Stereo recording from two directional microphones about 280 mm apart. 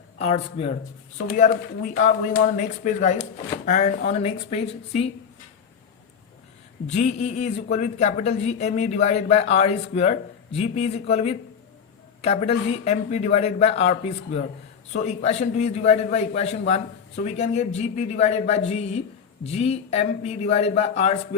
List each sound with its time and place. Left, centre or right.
0.2 s speech: left
6.9 s speech: left